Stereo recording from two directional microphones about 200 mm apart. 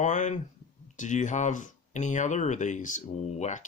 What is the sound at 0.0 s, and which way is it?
Speech, 40° left (ahead or behind).